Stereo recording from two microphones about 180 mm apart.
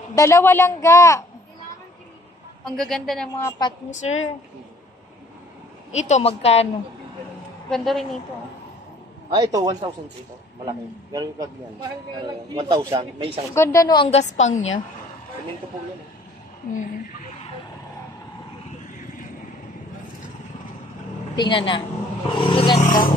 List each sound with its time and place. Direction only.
0.1 s a man's voice: 15° left (ahead or behind)
2.6 s a woman's voice: centre (ahead or behind)
3.3 s a woman's voice: 20° left (ahead or behind)
3.9 s a woman's voice: 40° left (ahead or behind)
5.9 s a woman's voice: 40° left (ahead or behind)
7.7 s a woman's voice: centre (ahead or behind)
9.4 s a man's voice: 20° right (ahead or behind)
12.5 s a man's voice: 30° right (ahead or behind)
13.6 s a woman's voice: 15° left (ahead or behind); by 14.7 s 40° left (ahead or behind)
21.4 s a woman's voice: 25° left (ahead or behind)
22.8 s speech: 50° left (ahead or behind)